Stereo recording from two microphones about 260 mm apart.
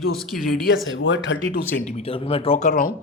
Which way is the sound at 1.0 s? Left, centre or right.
Left.